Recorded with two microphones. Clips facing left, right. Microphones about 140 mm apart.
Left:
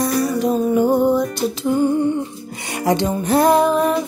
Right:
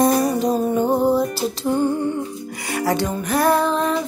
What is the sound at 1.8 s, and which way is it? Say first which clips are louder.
Music: left 6 dB; 15° left (ahead or behind).